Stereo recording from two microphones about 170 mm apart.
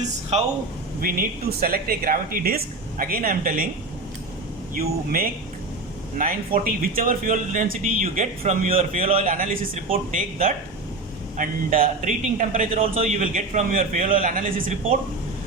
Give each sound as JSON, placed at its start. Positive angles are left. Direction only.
{"t": 0.0, "sound": "speech", "side_deg": -35}
{"t": 1.0, "sound": "speech", "side_deg": -55}
{"t": 4.7, "sound": "speech", "side_deg": -55}
{"t": 9.2, "sound": "speech", "side_deg": -50}